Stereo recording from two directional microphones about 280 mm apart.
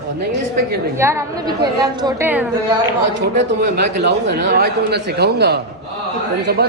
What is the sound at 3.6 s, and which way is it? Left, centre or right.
Speech, right.